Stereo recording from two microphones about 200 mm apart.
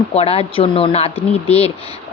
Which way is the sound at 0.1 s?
30° left (ahead or behind).